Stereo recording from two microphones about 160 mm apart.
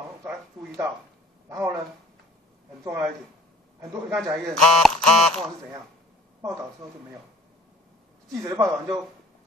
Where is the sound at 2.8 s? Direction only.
20° right (ahead or behind).